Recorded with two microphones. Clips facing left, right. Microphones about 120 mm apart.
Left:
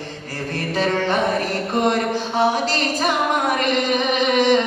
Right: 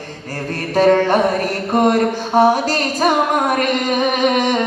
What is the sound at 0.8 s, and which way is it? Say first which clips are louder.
Speech: right 8 dB; 45° right (ahead or behind).